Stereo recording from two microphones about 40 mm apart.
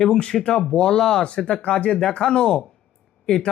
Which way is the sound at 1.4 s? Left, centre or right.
Left.